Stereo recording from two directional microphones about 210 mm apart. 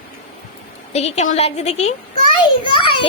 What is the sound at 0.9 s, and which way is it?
A woman's voice, 30° left (ahead or behind).